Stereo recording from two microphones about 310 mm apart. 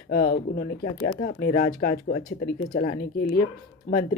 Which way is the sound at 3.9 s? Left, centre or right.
Left.